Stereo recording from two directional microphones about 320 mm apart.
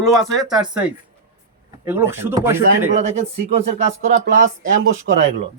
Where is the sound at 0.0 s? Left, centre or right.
Centre.